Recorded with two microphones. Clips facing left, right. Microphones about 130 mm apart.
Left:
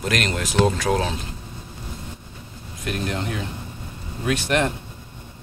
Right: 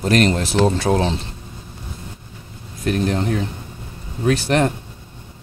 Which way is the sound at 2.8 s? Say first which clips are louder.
Right 7 dB; 35° right (ahead or behind).